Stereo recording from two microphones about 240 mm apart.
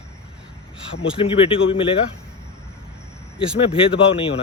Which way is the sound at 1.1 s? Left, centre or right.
Left.